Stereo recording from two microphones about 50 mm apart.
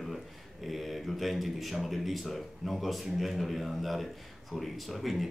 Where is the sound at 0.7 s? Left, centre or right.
Centre.